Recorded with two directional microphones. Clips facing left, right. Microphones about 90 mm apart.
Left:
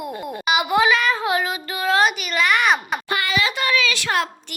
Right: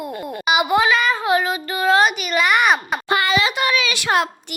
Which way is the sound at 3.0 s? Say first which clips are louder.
Right 5 dB; 25° right (ahead or behind).